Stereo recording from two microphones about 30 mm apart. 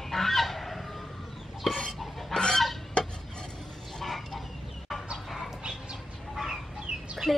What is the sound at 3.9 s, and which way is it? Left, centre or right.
Chicken, centre.